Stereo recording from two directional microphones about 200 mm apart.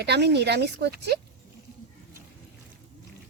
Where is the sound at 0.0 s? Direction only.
55° right (ahead or behind).